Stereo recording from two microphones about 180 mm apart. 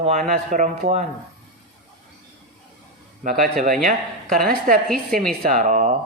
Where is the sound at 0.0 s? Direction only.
40° right (ahead or behind).